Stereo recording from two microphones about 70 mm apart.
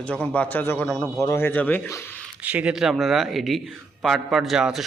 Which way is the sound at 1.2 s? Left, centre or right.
Left.